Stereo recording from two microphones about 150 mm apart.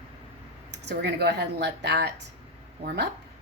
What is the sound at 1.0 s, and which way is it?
Speech, 90° right.